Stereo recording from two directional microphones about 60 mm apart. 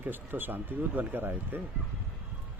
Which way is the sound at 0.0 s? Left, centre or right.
Right.